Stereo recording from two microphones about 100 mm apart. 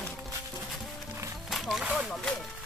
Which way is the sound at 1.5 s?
Centre (ahead or behind).